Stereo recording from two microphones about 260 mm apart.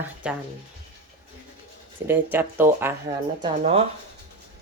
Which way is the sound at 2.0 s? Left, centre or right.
Centre.